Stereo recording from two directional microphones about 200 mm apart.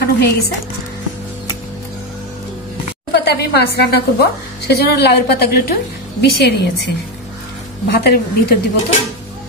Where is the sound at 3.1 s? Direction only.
55° left (ahead or behind).